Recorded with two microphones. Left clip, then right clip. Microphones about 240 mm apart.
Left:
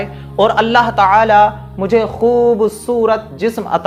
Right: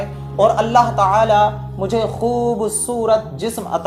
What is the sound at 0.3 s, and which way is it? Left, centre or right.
Speech, left.